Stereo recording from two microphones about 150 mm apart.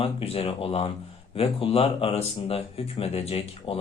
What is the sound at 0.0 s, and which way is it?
Speech, 40° left (ahead or behind).